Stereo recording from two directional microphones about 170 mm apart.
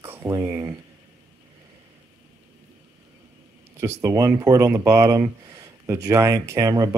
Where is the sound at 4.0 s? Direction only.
20° right (ahead or behind).